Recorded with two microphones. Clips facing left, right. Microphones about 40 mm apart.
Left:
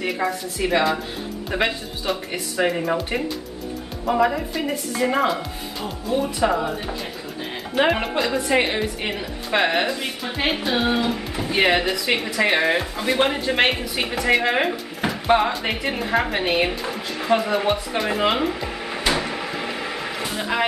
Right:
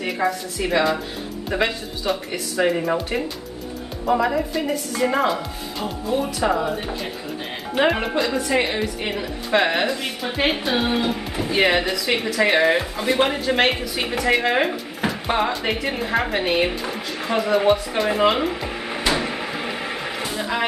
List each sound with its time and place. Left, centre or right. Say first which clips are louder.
0.0 s a woman's voice: right 1 dB; centre
8.4 s a woman's voice: left 3 dB; left
8.6 s a woman's voice: even; centre
20.3 s a sound: left 2 dB; centre